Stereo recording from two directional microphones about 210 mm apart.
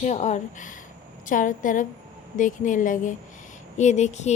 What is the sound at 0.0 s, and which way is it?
Speech, 35° left (ahead or behind).